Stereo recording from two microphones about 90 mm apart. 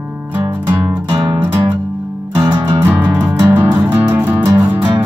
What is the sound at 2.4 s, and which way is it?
Music, 20° right (ahead or behind).